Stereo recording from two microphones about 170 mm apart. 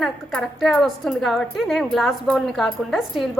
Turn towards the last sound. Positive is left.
turn(degrees=0)  # may be behind; listen again after turning